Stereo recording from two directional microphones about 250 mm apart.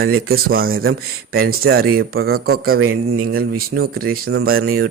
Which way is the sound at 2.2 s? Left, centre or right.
Right.